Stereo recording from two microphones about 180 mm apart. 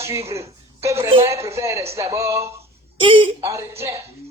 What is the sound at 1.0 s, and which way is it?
Speech, 30° right (ahead or behind).